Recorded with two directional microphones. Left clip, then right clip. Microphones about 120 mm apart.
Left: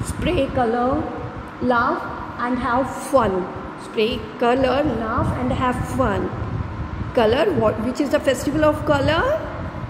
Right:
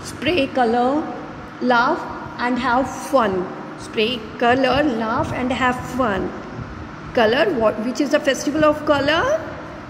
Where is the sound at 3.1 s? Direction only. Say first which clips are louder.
Even; 10° right (ahead or behind).